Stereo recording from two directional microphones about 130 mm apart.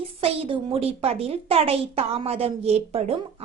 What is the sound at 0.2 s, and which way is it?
A woman's voice, 45° right (ahead or behind).